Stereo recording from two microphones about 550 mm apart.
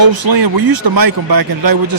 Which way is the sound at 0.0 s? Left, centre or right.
Right.